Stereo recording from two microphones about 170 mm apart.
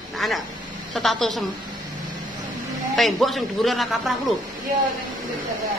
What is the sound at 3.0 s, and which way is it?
A man's voice, centre (ahead or behind).